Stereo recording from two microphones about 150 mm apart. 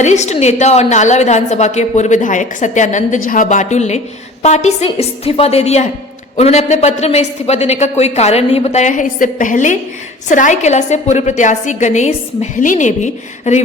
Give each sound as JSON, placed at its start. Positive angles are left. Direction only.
{"t": 0.0, "sound": "a woman's voice", "side_deg": 50}